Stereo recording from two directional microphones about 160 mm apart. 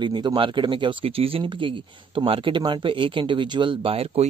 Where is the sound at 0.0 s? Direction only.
30° right (ahead or behind).